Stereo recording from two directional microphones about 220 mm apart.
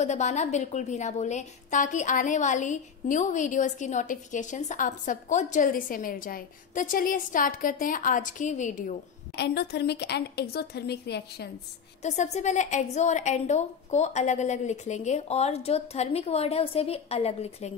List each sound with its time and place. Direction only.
0.0 s a woman's voice: 30° left (ahead or behind)
9.4 s a woman's voice: 50° left (ahead or behind)
12.0 s a woman's voice: 30° left (ahead or behind)